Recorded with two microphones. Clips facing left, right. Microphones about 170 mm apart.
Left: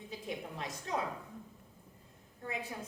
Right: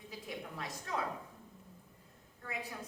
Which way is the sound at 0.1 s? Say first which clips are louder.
Left 3 dB; 25° left (ahead or behind).